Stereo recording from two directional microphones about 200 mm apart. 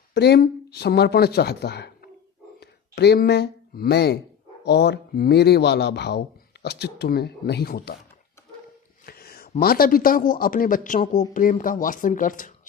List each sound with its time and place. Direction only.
0.1 s speech: 55° left (ahead or behind)
9.0 s a man's voice: 50° left (ahead or behind)